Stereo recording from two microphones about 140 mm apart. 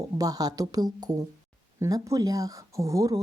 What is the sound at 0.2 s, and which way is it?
Speech, 25° right (ahead or behind).